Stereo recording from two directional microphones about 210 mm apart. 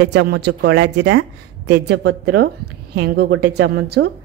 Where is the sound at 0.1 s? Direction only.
55° right (ahead or behind).